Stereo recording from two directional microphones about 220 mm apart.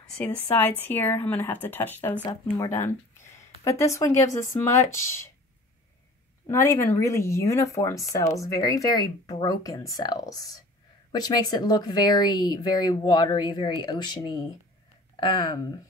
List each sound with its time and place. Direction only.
0.2 s speech: 10° left (ahead or behind)
6.4 s speech: 10° left (ahead or behind)